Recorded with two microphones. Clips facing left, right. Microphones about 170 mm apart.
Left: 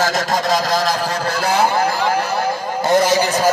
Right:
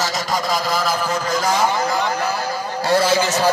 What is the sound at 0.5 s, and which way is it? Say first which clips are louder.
Speech: left 3 dB; 40° left (ahead or behind).